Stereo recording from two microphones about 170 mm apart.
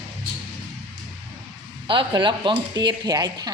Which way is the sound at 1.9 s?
30° right (ahead or behind).